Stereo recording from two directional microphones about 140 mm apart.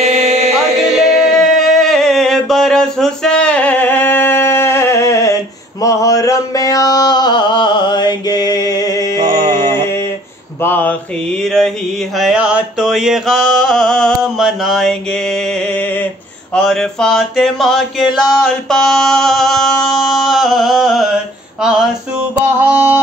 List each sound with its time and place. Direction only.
0.0 s chant: 50° right (ahead or behind)
1.0 s music: centre (ahead or behind); by 9.1 s 25° left (ahead or behind)
10.6 s mantra: 15° left (ahead or behind)
12.2 s a sound: 5° right (ahead or behind)